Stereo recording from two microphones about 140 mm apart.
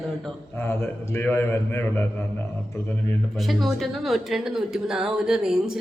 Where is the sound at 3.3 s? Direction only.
Centre (ahead or behind).